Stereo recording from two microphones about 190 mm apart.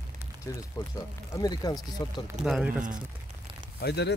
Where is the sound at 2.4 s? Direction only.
5° right (ahead or behind).